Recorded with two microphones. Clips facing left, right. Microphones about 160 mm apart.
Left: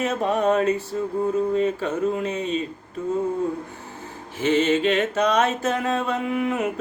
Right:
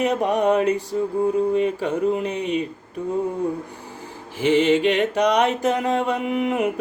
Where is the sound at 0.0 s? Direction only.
15° right (ahead or behind).